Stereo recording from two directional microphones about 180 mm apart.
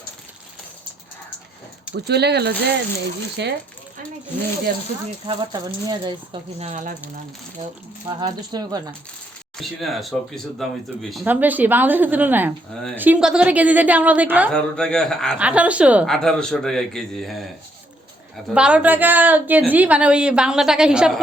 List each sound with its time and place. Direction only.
2.0 s speech: 65° right (ahead or behind)
5.2 s speech: 25° right (ahead or behind)
8.0 s speech: 25° right (ahead or behind)
9.6 s a woman's voice: centre (ahead or behind)
14.5 s a woman's voice: 5° left (ahead or behind)